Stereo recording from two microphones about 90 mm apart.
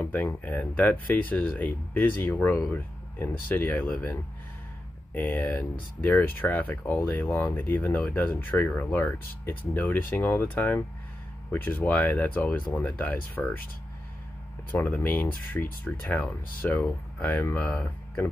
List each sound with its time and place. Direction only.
0.0 s speech: 20° left (ahead or behind)
5.1 s speech: 25° left (ahead or behind)
14.7 s speech: 20° left (ahead or behind)